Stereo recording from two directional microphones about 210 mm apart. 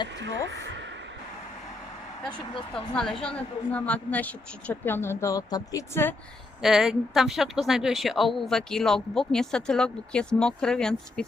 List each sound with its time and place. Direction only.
0.4 s a sound: 55° right (ahead or behind)
2.7 s a woman's voice: 5° left (ahead or behind)
6.6 s speech: centre (ahead or behind)